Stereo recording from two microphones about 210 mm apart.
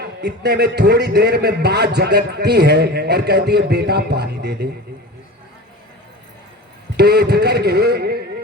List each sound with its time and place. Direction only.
0.0 s a man's voice: 50° right (ahead or behind)
6.9 s a man's voice: 50° right (ahead or behind)